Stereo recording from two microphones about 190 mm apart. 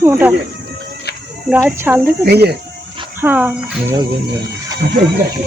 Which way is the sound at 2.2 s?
60° right (ahead or behind).